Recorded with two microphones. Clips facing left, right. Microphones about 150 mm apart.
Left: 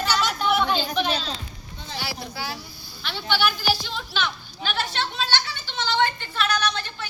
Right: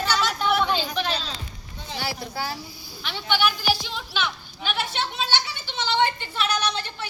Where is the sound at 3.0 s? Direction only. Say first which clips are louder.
Even; 10° right (ahead or behind).